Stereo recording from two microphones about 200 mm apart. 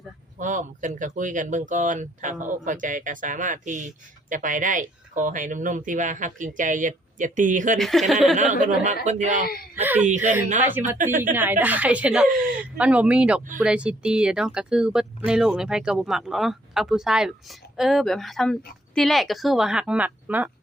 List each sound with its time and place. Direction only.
0.3 s speech: 40° right (ahead or behind)
7.8 s speech: centre (ahead or behind)
9.0 s speech: 40° right (ahead or behind)
10.6 s a woman's voice: 10° right (ahead or behind)
10.9 s speech: 40° right (ahead or behind)
11.2 s a woman's voice: 10° right (ahead or behind)